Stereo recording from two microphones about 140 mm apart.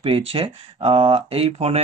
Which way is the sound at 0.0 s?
40° right (ahead or behind).